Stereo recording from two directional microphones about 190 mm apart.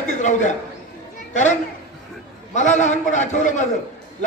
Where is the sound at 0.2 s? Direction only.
40° left (ahead or behind).